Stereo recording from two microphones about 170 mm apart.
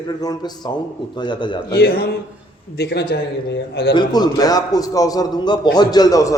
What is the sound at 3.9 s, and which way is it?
A man's voice, 25° left (ahead or behind).